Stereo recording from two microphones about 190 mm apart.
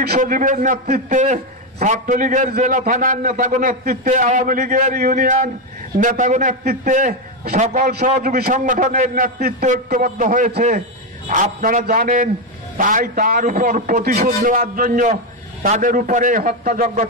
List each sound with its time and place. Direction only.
0.0 s a man's voice: 50° right (ahead or behind)